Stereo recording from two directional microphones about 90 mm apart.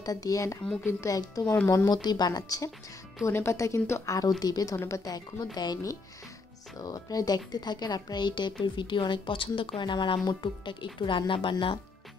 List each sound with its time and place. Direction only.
0.0 s a woman's voice: 45° left (ahead or behind)
3.3 s a woman's voice: 30° left (ahead or behind); by 5.8 s 50° left (ahead or behind)
6.8 s a woman's voice: 40° left (ahead or behind); by 11.8 s 70° left (ahead or behind)